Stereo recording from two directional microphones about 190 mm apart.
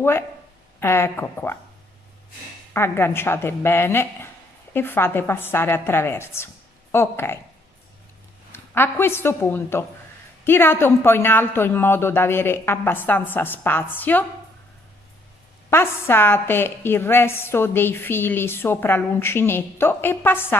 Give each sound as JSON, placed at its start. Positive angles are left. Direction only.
{"t": 0.7, "sound": "a woman's voice", "side_deg": 15}
{"t": 2.7, "sound": "a woman's voice", "side_deg": 10}
{"t": 8.5, "sound": "a woman's voice", "side_deg": 10}
{"t": 15.7, "sound": "a woman's voice", "side_deg": 10}